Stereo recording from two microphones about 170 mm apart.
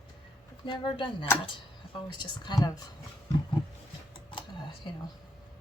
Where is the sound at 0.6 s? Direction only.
30° left (ahead or behind).